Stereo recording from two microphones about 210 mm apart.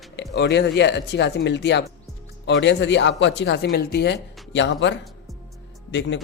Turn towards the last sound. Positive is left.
turn(degrees=60)  # may be behind; listen again after turning